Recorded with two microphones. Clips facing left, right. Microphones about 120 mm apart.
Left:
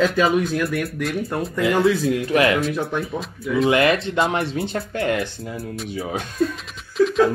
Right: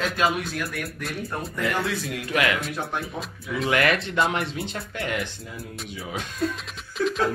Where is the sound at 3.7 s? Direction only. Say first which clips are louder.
Left 4 dB; 25° left (ahead or behind).